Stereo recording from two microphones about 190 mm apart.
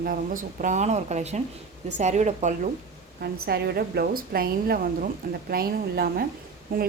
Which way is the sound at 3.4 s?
55° right (ahead or behind).